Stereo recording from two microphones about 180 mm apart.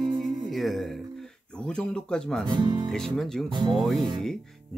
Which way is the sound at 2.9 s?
Centre (ahead or behind).